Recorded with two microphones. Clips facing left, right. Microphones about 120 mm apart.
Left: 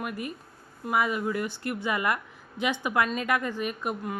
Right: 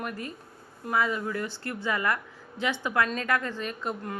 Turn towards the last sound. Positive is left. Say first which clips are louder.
# left 2 dB
turn(degrees=10)  # may be behind; listen again after turning